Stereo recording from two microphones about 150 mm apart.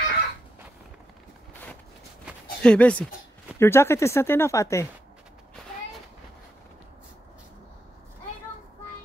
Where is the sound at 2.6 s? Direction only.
10° left (ahead or behind).